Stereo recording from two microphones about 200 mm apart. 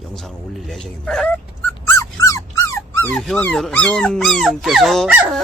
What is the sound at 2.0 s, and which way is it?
Dog, 15° left (ahead or behind).